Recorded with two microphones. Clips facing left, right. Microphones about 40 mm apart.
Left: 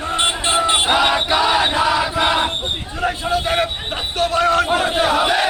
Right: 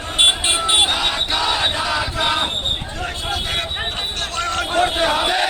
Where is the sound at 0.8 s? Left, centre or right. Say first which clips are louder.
Left 4 dB; centre.